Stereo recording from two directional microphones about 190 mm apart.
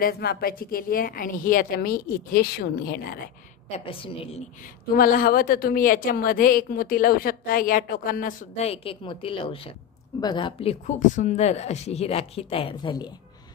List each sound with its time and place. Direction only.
0.0 s a woman's voice: 55° left (ahead or behind)
3.7 s a woman's voice: 30° left (ahead or behind)
4.9 s a woman's voice: 50° left (ahead or behind); by 13.1 s 25° left (ahead or behind)